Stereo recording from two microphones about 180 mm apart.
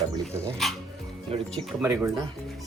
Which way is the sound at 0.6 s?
Centre (ahead or behind).